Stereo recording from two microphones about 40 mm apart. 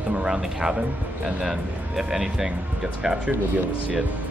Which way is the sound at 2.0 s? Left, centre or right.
Centre.